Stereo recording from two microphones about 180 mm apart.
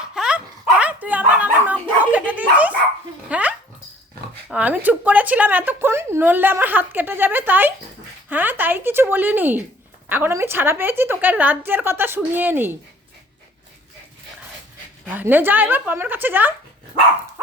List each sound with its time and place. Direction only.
0.1 s dog: 5° right (ahead or behind)
4.4 s speech: 5° right (ahead or behind)
15.0 s speech: 10° right (ahead or behind)